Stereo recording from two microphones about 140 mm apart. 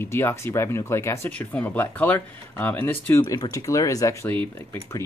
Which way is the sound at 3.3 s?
30° left (ahead or behind).